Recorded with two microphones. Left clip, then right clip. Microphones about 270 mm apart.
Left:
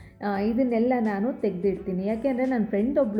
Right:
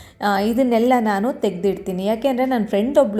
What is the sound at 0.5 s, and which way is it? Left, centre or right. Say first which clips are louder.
A woman's voice: right 6 dB; centre.